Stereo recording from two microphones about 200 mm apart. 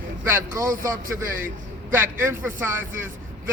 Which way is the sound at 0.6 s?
45° right (ahead or behind).